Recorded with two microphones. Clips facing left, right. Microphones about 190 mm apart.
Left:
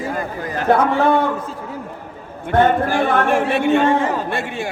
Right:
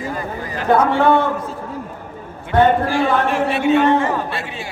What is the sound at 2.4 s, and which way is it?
A man's voice, 50° left (ahead or behind).